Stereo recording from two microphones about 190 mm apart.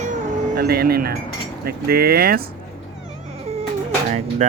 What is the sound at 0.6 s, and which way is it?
Speech, 55° right (ahead or behind).